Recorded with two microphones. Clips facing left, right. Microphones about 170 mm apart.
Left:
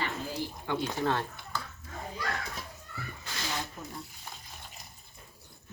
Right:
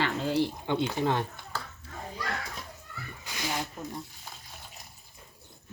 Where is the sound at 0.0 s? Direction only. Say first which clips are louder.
Right 8 dB; 75° right (ahead or behind).